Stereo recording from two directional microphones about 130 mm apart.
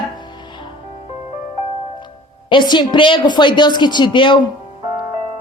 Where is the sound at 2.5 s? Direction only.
35° left (ahead or behind).